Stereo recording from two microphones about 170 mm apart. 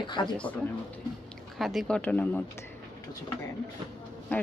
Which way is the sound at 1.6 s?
Centre (ahead or behind).